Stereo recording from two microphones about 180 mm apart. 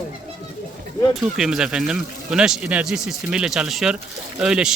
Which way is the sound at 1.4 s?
5° right (ahead or behind).